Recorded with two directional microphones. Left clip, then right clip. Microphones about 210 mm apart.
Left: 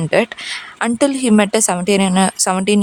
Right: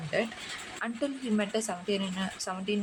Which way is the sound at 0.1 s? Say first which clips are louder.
Left 15 dB; 60° left (ahead or behind).